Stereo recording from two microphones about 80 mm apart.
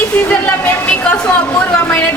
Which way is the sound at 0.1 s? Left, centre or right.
Centre.